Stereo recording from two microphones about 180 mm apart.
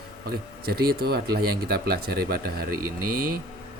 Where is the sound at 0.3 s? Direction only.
60° right (ahead or behind).